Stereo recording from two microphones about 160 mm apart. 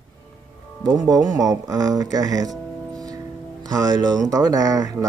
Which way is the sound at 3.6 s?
25° right (ahead or behind).